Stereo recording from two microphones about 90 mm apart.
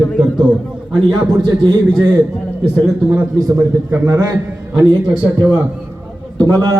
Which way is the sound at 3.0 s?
20° right (ahead or behind).